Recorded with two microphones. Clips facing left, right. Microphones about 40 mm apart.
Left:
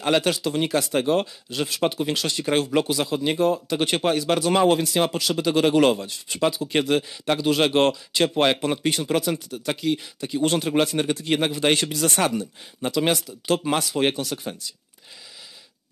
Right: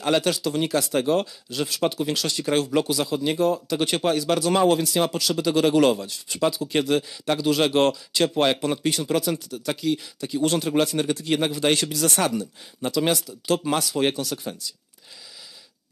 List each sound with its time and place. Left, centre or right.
0.0 s speech: left